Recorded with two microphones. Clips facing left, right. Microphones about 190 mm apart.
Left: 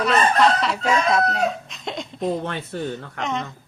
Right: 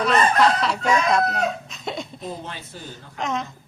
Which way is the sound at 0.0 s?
Centre (ahead or behind).